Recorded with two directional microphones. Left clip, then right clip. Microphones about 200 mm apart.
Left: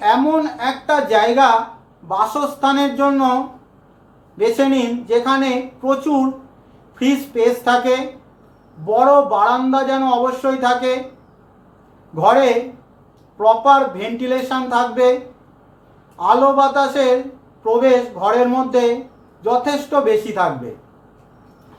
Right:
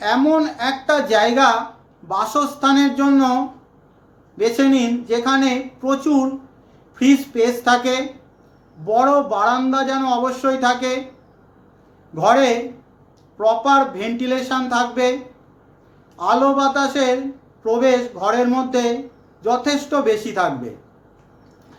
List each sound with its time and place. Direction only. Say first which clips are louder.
0.0 s a woman's voice: left 2 dB; 20° right (ahead or behind)
4.4 s a man's voice: left 1 dB; 15° right (ahead or behind)
12.1 s a man's voice: left 2 dB; 15° right (ahead or behind)
16.1 s a man's voice: left 3 dB; 15° right (ahead or behind)